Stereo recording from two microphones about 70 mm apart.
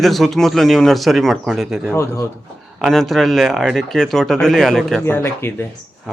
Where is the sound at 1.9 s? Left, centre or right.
Left.